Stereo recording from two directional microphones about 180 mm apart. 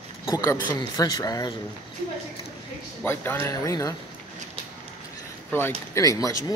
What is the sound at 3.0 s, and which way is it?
Speech, 10° left (ahead or behind).